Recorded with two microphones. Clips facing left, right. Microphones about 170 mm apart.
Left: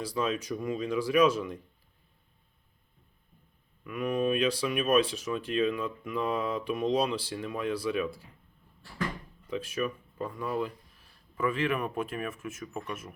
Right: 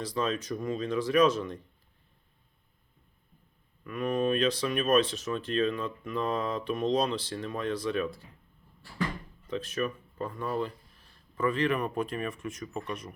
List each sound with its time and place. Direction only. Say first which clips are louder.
0.0 s speech: even; 10° left (ahead or behind)
3.8 s speech: even; 10° left (ahead or behind)
9.5 s speech: even; 10° left (ahead or behind)